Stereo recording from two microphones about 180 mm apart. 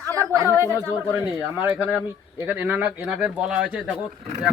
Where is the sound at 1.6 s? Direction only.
10° right (ahead or behind).